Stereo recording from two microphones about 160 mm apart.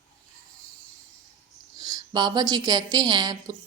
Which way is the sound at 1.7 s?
25° right (ahead or behind).